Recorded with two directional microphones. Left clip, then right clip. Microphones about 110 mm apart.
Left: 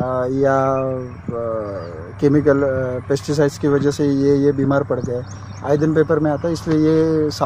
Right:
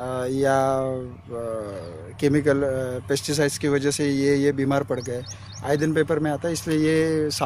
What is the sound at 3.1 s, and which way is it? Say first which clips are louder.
Speech: left 5 dB; 5° right (ahead or behind).